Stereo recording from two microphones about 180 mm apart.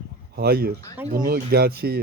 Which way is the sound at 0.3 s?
60° right (ahead or behind).